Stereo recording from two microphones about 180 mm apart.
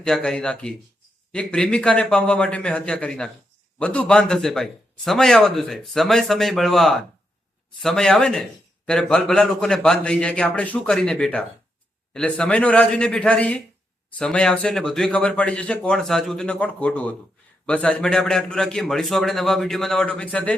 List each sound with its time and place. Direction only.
0.0 s a man's voice: 5° left (ahead or behind)